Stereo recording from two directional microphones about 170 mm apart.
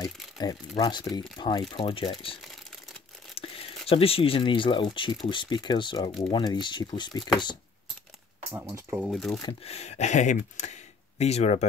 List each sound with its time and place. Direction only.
0.4 s speech: 25° left (ahead or behind)
3.3 s speech: 35° left (ahead or behind)
8.5 s speech: 15° right (ahead or behind)
9.1 s speech: centre (ahead or behind)
9.4 s speech: 30° left (ahead or behind)